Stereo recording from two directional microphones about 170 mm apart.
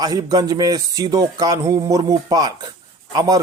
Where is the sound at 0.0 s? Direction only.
25° right (ahead or behind).